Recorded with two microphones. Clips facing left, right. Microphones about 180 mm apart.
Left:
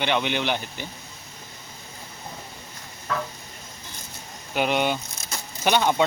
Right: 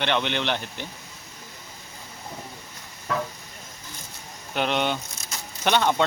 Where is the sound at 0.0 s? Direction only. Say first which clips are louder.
Left 1 dB; 5° left (ahead or behind).